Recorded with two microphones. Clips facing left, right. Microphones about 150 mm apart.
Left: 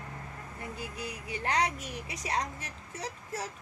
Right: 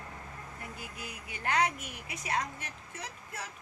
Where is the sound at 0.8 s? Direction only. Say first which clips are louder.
Left 5 dB; 35° left (ahead or behind).